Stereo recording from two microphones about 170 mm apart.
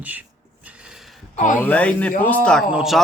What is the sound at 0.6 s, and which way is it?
Mechanisms, 5° right (ahead or behind).